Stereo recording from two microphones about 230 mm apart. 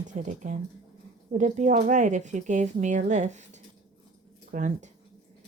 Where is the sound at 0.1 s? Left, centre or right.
Right.